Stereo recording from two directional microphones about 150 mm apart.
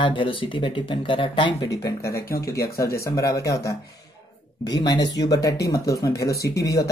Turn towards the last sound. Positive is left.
turn(degrees=20)  # may be behind; listen again after turning